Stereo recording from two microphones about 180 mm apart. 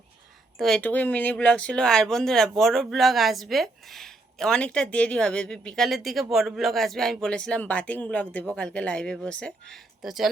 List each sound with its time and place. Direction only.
0.6 s speech: 5° left (ahead or behind)